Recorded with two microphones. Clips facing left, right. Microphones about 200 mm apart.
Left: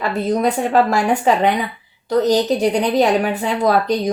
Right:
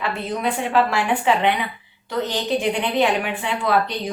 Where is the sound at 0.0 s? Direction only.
40° left (ahead or behind).